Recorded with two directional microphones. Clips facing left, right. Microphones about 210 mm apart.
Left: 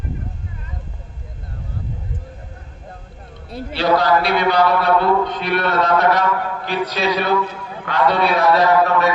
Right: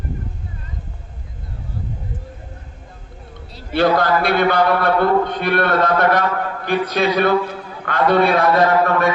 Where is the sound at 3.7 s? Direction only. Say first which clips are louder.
Right 1 dB; 50° right (ahead or behind).